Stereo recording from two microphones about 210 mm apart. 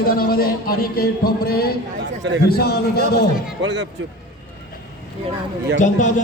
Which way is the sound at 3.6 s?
60° right (ahead or behind).